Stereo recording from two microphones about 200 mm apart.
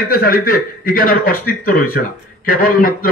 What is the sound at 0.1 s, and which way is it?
A man's voice, 45° left (ahead or behind).